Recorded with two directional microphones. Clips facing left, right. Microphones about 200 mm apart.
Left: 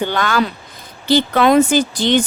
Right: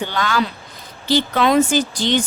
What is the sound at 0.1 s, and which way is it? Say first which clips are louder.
Speech: left 3 dB; 55° left (ahead or behind).